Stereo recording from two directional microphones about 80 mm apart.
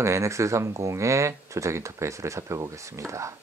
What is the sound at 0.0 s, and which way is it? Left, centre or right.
Speech, right.